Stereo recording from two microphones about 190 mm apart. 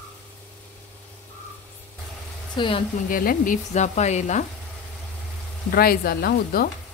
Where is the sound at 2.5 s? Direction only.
25° left (ahead or behind).